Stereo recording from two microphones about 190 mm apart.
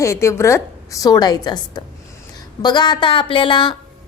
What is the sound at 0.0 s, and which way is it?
A woman's voice, 15° left (ahead or behind).